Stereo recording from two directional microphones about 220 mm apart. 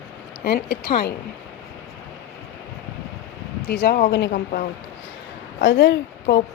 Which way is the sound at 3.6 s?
45° left (ahead or behind).